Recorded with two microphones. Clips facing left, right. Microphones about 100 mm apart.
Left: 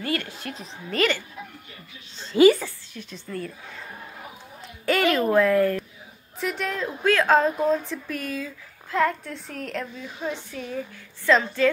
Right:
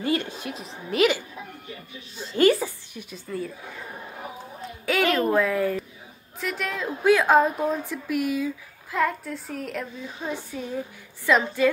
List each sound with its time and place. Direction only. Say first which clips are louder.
0.0 s a woman's voice: right 3 dB; 20° right (ahead or behind)
0.8 s a woman's voice: right 3 dB; 5° right (ahead or behind)
2.3 s speech: left 3 dB; 5° left (ahead or behind)
2.6 s speech: right 4 dB; 15° right (ahead or behind)
4.8 s a woman's voice: left 1 dB; centre (ahead or behind)